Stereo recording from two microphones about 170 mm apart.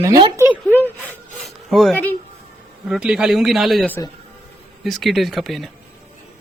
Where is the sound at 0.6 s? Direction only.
10° left (ahead or behind).